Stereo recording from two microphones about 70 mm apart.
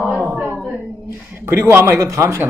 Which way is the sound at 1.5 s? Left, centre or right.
Right.